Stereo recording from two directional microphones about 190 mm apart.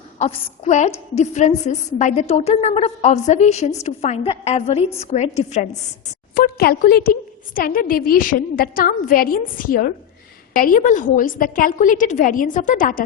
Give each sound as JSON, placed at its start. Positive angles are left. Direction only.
{"t": 0.2, "sound": "a woman's voice", "side_deg": 40}
{"t": 6.3, "sound": "a woman's voice", "side_deg": 50}